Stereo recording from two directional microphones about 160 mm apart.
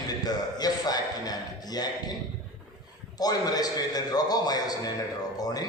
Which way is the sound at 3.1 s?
25° left (ahead or behind).